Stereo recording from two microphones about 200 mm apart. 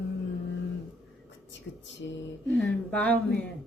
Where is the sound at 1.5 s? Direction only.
65° left (ahead or behind).